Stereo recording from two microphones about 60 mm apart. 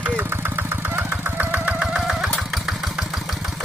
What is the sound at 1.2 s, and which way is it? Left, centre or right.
Engine, right.